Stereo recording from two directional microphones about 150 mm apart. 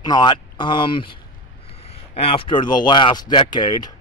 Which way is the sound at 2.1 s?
40° left (ahead or behind).